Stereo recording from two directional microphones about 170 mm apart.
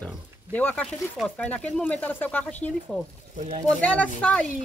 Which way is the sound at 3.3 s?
45° right (ahead or behind).